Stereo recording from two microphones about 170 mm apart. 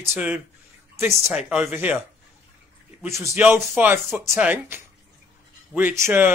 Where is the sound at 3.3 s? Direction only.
10° right (ahead or behind).